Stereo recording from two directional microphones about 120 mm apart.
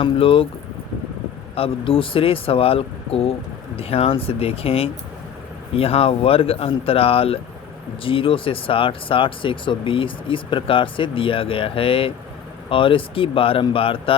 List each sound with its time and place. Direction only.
0.0 s speech: 50° left (ahead or behind)
1.5 s speech: 50° left (ahead or behind)